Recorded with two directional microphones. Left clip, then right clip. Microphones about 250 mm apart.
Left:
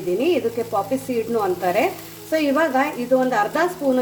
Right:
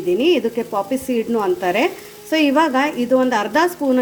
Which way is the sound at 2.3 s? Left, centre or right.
Right.